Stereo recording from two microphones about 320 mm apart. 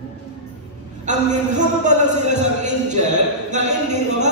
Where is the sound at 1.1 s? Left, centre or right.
Right.